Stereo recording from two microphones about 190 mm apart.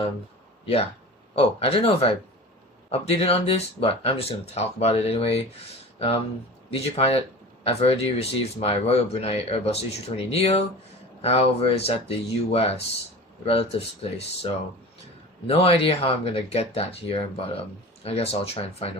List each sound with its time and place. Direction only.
0.6 s speech: 30° left (ahead or behind)